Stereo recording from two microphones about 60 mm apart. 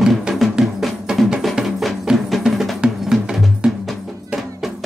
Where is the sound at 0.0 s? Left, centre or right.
Centre.